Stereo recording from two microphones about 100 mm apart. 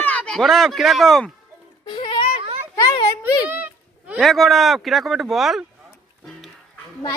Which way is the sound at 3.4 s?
15° right (ahead or behind).